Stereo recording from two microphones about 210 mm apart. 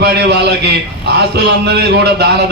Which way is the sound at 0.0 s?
50° right (ahead or behind).